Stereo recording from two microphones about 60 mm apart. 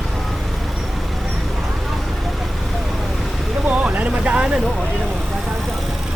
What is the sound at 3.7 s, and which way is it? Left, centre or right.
Vehicle, right.